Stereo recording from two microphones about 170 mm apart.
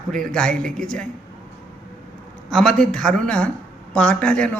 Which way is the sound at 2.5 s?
Centre (ahead or behind).